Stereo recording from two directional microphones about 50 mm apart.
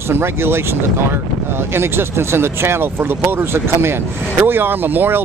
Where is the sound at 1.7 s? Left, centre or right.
Right.